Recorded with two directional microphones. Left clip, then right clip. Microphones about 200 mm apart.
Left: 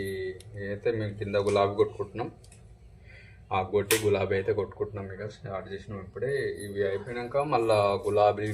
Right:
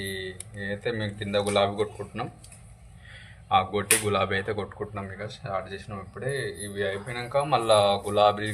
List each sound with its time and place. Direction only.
0.6 s a man's voice: 20° left (ahead or behind)
3.5 s a man's voice: 20° left (ahead or behind)